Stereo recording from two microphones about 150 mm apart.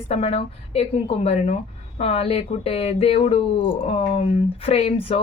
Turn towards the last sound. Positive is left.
turn(degrees=40)  # may be behind; listen again after turning